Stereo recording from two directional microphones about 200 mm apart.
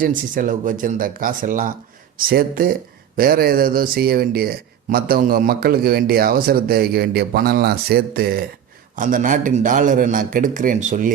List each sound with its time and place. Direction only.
0.0 s speech: 45° right (ahead or behind)
9.0 s a man's voice: 40° right (ahead or behind)